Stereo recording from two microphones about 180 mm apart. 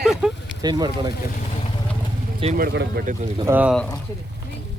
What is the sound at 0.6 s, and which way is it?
Speech, 20° right (ahead or behind).